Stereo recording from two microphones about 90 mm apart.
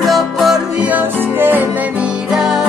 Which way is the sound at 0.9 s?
20° right (ahead or behind).